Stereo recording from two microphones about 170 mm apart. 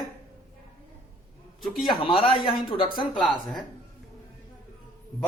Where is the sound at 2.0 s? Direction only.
30° left (ahead or behind).